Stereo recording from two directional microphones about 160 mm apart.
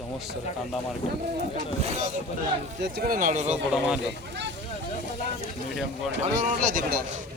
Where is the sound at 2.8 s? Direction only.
65° right (ahead or behind); by 3.6 s 45° right (ahead or behind).